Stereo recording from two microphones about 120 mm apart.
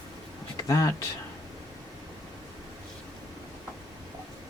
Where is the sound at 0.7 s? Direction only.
30° left (ahead or behind).